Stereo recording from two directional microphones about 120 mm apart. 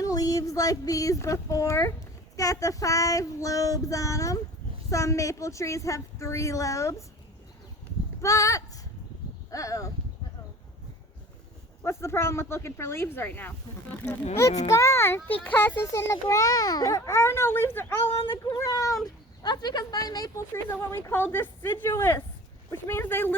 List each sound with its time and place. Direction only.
0.0 s a woman's voice: 30° left (ahead or behind)
8.2 s speech: 25° left (ahead or behind)
9.5 s a sound: 30° left (ahead or behind)
11.8 s a woman's voice: 20° left (ahead or behind)
14.7 s a woman's voice: 25° left (ahead or behind)
18.5 s a woman's voice: 30° left (ahead or behind)